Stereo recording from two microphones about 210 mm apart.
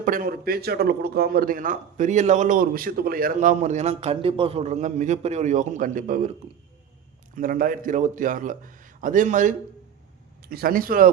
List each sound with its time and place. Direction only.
0.0 s speech: 40° right (ahead or behind)
7.3 s speech: 40° right (ahead or behind)